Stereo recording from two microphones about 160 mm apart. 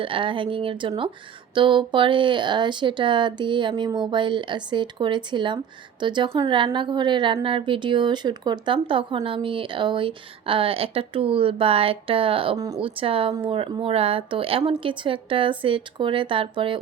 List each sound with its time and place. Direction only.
0.0 s speech: 35° right (ahead or behind)